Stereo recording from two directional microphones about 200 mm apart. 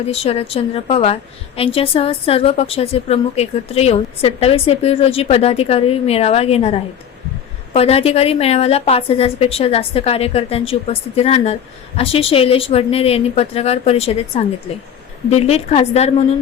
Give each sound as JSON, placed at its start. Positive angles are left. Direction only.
{"t": 0.0, "sound": "a woman's voice", "side_deg": 30}